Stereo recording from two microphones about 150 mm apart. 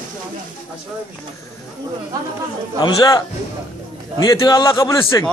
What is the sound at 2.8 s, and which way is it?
A man's voice, 25° left (ahead or behind).